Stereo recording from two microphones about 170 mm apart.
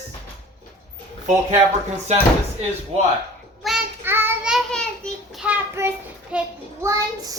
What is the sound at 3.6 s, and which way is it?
Child singing, centre (ahead or behind).